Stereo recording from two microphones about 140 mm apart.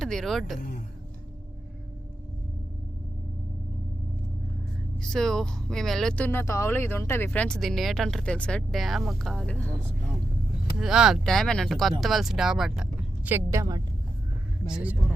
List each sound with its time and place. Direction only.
0.0 s speech: 5° left (ahead or behind)
4.9 s speech: 5° left (ahead or behind)
10.8 s speech: 5° right (ahead or behind); by 13.8 s 25° right (ahead or behind)
14.7 s speech: 5° right (ahead or behind)